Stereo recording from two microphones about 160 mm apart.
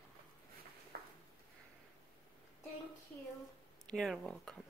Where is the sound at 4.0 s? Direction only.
5° left (ahead or behind).